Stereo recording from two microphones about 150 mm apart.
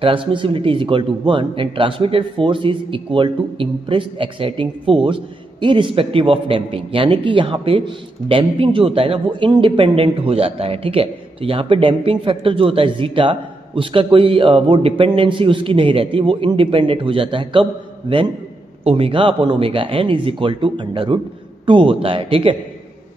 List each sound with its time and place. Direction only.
0.0 s a man's voice: 35° right (ahead or behind)
18.9 s a man's voice: 40° right (ahead or behind)